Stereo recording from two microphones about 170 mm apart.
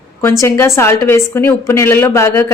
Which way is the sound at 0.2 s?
15° left (ahead or behind).